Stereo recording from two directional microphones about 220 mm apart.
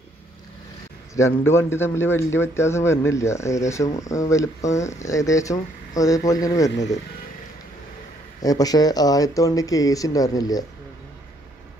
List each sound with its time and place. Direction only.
1.1 s a man's voice: 10° left (ahead or behind)
8.4 s a man's voice: 15° left (ahead or behind)